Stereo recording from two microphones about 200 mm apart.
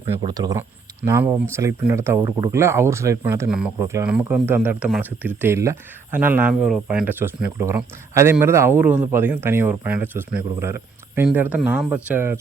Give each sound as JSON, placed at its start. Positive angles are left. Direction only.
{"t": 0.2, "sound": "speech", "side_deg": -20}